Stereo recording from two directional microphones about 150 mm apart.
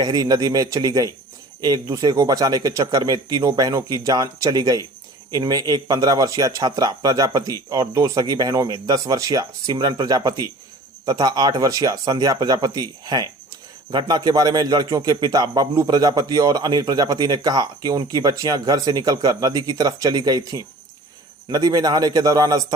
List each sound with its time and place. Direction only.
0.0 s a man's voice: 25° right (ahead or behind)